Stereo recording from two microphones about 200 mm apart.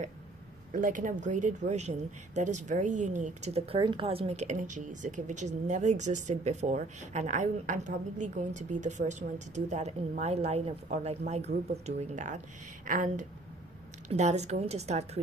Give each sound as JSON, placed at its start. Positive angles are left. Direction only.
{"t": 0.7, "sound": "speech", "side_deg": -40}